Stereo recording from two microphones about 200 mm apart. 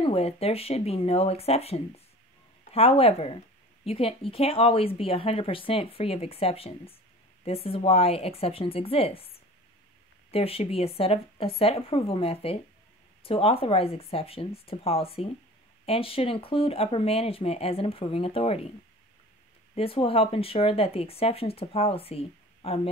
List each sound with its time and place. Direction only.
0.0 s speech: 30° left (ahead or behind)
10.3 s speech: 30° left (ahead or behind)
19.7 s speech: 30° left (ahead or behind)